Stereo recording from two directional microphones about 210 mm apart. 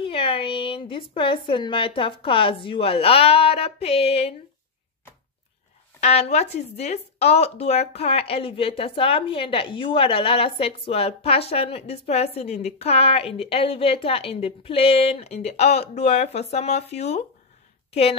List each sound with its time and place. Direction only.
0.0 s speech: 25° left (ahead or behind)
5.9 s speech: 30° left (ahead or behind)